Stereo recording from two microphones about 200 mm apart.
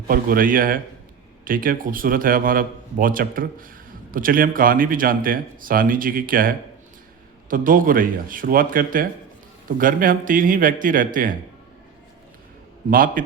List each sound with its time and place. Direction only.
0.1 s a man's voice: 45° right (ahead or behind)
7.5 s a man's voice: 45° right (ahead or behind)
12.9 s a man's voice: 45° right (ahead or behind)